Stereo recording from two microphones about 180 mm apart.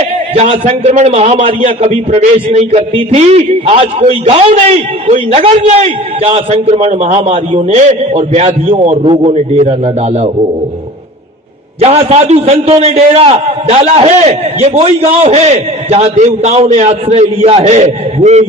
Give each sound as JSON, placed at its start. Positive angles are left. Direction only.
{"t": 0.3, "sound": "a man's voice", "side_deg": -35}
{"t": 11.8, "sound": "a man's voice", "side_deg": -35}